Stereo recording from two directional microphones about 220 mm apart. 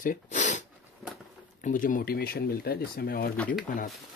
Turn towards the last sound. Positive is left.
turn(degrees=5)  # may be behind; listen again after turning